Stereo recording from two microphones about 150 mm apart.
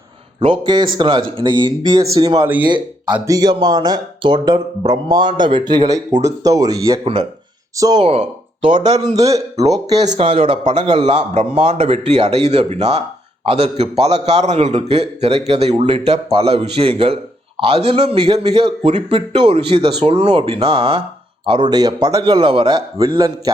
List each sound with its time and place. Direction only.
0.3 s a man's voice: 40° right (ahead or behind)
7.0 s a man's voice: 40° right (ahead or behind)
7.8 s speech: 25° right (ahead or behind)
8.0 s a man's voice: 40° right (ahead or behind)
10.8 s a man's voice: 35° right (ahead or behind)
11.2 s a man's voice: 45° right (ahead or behind); by 23.3 s 25° right (ahead or behind)